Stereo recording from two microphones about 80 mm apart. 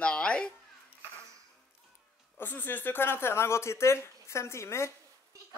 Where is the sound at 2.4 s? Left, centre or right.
Left.